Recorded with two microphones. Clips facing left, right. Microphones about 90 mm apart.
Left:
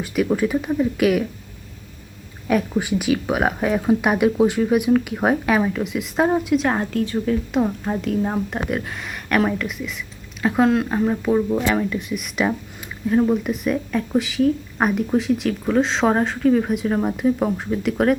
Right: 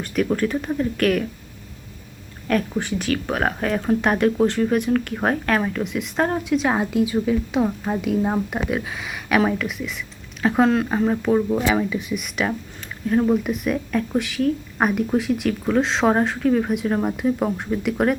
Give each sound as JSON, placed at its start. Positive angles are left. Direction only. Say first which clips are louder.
{"t": 0.0, "sound": "speech", "louder": "left 1 dB", "side_deg": 5}
{"t": 2.5, "sound": "speech", "louder": "left 2 dB", "side_deg": 5}